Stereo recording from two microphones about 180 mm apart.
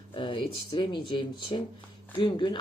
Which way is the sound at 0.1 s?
25° left (ahead or behind).